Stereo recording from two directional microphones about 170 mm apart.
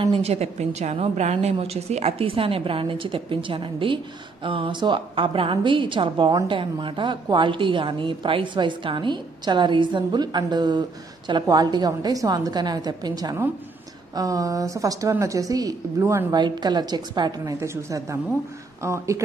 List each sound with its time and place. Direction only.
0.0 s a woman's voice: 35° right (ahead or behind); by 19.2 s 15° right (ahead or behind)